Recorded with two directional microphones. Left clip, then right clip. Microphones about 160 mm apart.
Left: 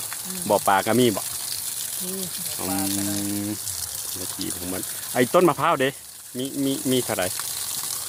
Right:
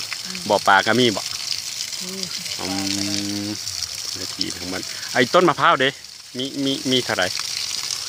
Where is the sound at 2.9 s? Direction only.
20° right (ahead or behind).